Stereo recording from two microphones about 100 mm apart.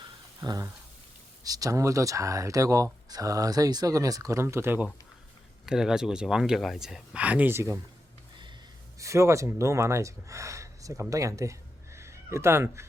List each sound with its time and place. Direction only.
0.4 s speech: 40° right (ahead or behind); by 4.9 s 20° right (ahead or behind)
5.6 s speech: 5° right (ahead or behind); by 7.8 s 25° right (ahead or behind)
9.0 s speech: 30° right (ahead or behind)